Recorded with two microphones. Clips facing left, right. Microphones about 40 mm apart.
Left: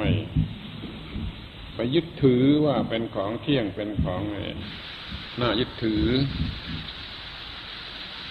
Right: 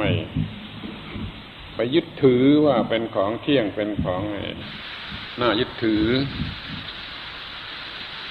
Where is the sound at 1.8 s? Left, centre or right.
Centre.